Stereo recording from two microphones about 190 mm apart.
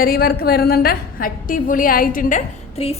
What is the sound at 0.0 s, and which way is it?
A woman's voice, 55° left (ahead or behind).